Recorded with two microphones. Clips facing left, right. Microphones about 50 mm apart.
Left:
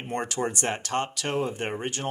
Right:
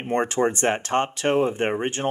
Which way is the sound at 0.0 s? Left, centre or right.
Right.